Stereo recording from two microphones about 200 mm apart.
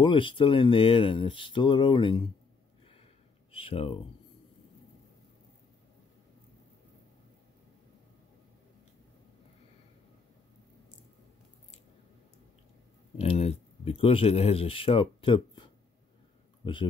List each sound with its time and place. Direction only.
0.0 s speech: 25° left (ahead or behind)
3.5 s speech: 30° left (ahead or behind)
13.2 s speech: 30° left (ahead or behind)